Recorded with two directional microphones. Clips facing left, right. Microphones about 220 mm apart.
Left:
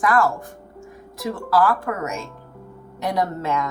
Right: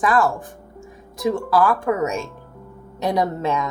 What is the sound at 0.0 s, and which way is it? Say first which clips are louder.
A woman's voice: right 1 dB; 20° right (ahead or behind).